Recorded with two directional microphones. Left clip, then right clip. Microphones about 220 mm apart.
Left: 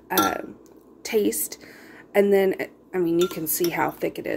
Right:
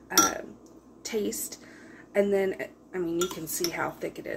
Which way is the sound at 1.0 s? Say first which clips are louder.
Left 8 dB; 35° left (ahead or behind).